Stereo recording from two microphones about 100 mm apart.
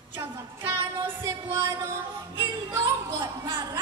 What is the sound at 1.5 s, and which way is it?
Music, 25° right (ahead or behind).